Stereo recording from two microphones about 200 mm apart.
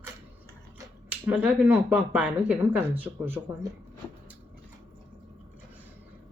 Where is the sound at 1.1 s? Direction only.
10° right (ahead or behind).